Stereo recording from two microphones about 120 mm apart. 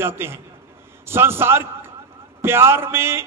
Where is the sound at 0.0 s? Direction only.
20° right (ahead or behind).